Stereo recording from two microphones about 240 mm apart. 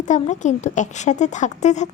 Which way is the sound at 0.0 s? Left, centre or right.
Left.